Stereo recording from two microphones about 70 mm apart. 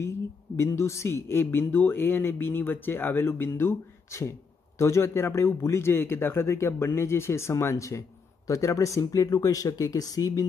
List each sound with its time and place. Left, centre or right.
0.6 s speech: left